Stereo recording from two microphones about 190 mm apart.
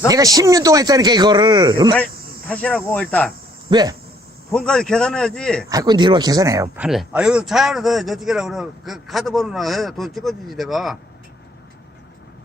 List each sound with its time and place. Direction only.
0.1 s speech: 20° right (ahead or behind)
2.5 s a man's voice: 5° left (ahead or behind)
3.7 s speech: 20° right (ahead or behind)
4.5 s a man's voice: 5° left (ahead or behind)
5.6 s speech: 20° right (ahead or behind)
6.8 s a man's voice: 5° right (ahead or behind)